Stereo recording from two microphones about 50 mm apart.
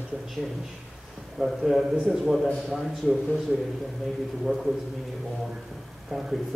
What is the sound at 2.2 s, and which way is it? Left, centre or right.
A man's voice, centre.